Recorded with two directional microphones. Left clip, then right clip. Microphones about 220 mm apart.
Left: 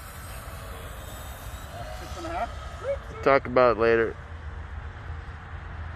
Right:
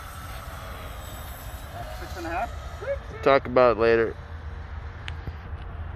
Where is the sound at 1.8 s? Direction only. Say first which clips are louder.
Right 1 dB; centre (ahead or behind).